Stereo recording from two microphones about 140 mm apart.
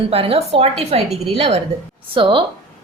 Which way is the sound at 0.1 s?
45° right (ahead or behind).